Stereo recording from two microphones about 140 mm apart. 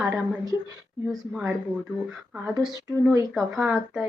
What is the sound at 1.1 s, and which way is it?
Speech, centre (ahead or behind).